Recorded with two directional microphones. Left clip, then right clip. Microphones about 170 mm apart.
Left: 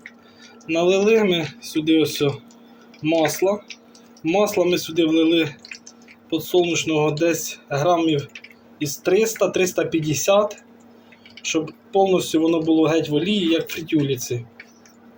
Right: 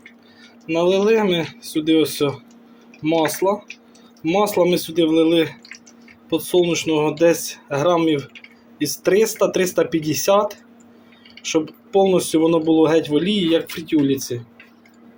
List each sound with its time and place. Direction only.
0.7 s speech: 20° right (ahead or behind)